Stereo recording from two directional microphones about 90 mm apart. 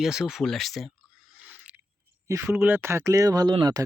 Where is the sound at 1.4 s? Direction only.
15° right (ahead or behind).